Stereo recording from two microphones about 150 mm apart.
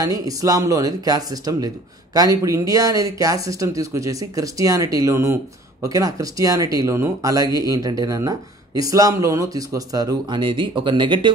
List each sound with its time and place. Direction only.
0.0 s speech: 25° right (ahead or behind)